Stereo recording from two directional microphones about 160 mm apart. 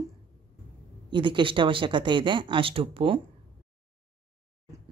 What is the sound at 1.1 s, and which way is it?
Speech, 30° right (ahead or behind).